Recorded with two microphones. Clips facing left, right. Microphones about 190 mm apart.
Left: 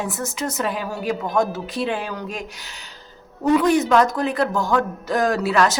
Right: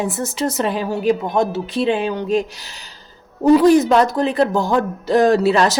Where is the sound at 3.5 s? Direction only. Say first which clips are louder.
Right 5 dB; 35° right (ahead or behind).